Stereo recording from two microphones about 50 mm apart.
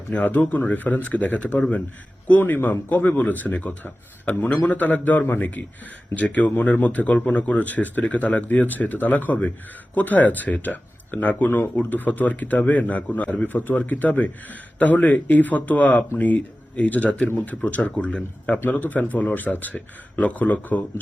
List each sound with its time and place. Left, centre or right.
0.1 s speech: left
4.3 s a man's voice: left